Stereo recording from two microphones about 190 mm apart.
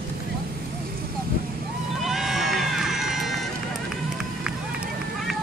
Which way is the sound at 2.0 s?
Centre (ahead or behind).